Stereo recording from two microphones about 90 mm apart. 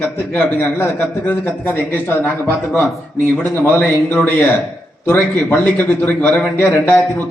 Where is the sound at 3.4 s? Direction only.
20° left (ahead or behind).